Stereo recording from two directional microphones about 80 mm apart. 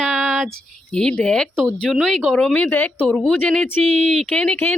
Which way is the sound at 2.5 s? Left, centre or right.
Centre.